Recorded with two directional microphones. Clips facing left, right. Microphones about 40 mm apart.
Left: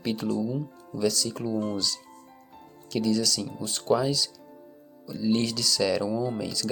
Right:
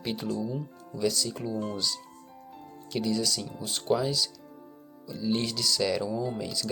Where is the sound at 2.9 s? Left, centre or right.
Centre.